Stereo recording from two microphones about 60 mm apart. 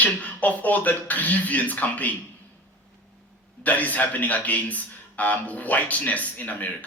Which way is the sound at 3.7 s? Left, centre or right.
Left.